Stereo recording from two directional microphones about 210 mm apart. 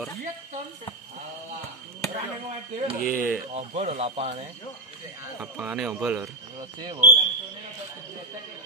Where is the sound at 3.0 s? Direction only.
40° left (ahead or behind).